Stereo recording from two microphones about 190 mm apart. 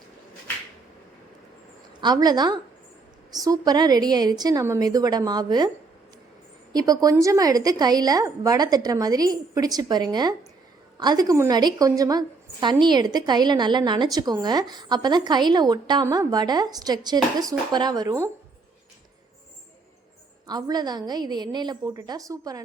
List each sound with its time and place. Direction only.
2.0 s a woman's voice: 20° right (ahead or behind)
6.7 s a woman's voice: 20° right (ahead or behind)
20.5 s a woman's voice: 20° right (ahead or behind)